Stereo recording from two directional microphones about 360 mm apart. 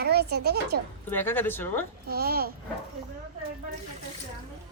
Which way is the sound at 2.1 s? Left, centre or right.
Right.